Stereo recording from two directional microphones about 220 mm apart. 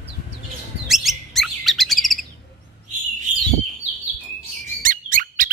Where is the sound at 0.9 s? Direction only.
Centre (ahead or behind).